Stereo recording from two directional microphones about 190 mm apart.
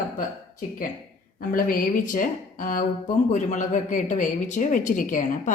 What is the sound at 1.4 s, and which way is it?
Speech, 45° left (ahead or behind).